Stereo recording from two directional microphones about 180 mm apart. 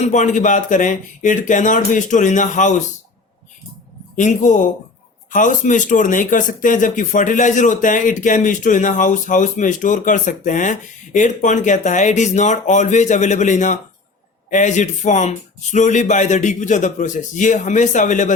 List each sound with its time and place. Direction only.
0.0 s speech: 45° left (ahead or behind)
4.2 s speech: 45° left (ahead or behind)